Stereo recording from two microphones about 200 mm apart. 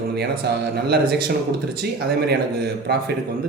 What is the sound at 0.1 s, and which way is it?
A man's voice, 55° right (ahead or behind).